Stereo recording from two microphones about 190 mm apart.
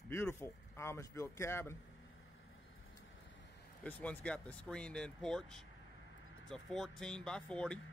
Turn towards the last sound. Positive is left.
turn(degrees=5)  # may be behind; listen again after turning